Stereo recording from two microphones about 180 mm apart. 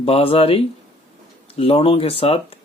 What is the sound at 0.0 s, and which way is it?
Speech, 30° left (ahead or behind).